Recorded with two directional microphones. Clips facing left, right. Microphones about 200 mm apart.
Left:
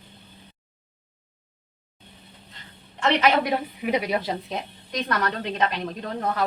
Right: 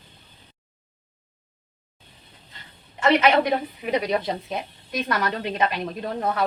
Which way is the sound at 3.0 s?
Centre (ahead or behind).